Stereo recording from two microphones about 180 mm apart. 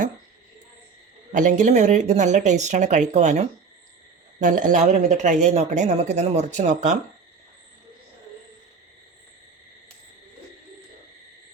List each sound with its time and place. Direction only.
1.3 s speech: 45° right (ahead or behind)